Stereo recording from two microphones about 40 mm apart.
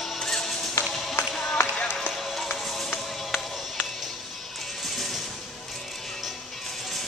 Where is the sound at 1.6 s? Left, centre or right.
Left.